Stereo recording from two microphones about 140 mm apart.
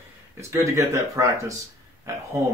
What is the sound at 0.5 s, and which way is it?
Speech, 20° right (ahead or behind).